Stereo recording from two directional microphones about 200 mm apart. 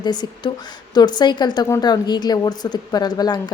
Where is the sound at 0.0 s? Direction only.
20° left (ahead or behind).